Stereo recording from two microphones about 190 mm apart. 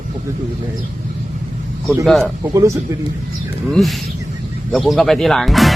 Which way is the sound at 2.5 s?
15° right (ahead or behind).